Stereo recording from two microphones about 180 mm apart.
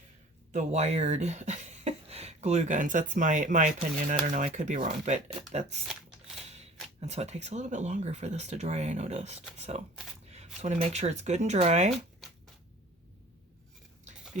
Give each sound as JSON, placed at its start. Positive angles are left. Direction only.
{"t": 0.5, "sound": "speech", "side_deg": -40}
{"t": 7.0, "sound": "speech", "side_deg": -35}